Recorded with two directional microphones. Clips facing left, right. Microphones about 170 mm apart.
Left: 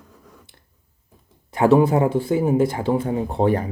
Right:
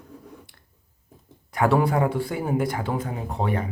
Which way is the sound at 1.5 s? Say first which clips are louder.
Left 6 dB; 25° left (ahead or behind).